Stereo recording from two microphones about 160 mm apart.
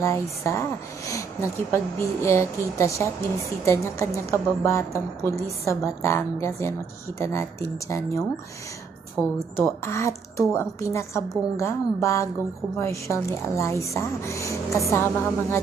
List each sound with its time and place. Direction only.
0.0 s a woman's voice: 20° left (ahead or behind)